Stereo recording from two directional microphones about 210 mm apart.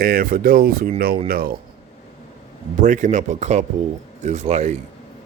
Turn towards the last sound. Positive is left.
turn(degrees=-30)  # may be behind; listen again after turning